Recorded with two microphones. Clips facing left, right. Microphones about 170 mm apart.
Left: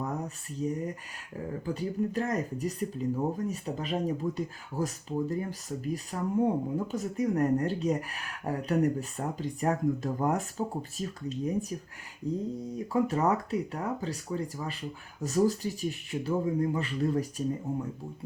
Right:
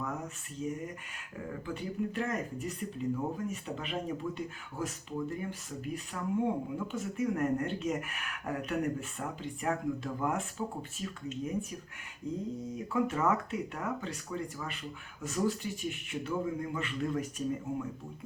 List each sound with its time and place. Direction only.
0.6 s speech: 35° left (ahead or behind)